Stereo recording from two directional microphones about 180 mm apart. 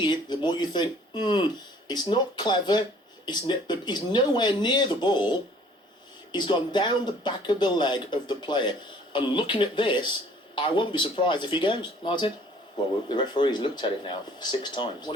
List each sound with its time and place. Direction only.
0.0 s speech: 25° left (ahead or behind)